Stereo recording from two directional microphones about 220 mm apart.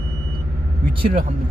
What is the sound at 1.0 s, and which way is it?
Speech, 35° right (ahead or behind).